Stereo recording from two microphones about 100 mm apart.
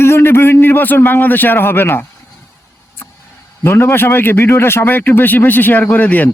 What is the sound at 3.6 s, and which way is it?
A man's voice, 25° left (ahead or behind).